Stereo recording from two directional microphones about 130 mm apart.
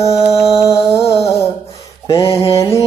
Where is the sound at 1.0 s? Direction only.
50° left (ahead or behind).